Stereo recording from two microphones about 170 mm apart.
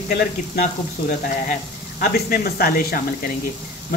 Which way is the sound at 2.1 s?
60° left (ahead or behind).